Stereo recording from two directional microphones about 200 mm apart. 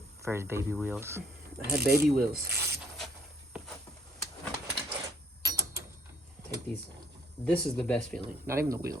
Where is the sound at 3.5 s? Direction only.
5° right (ahead or behind).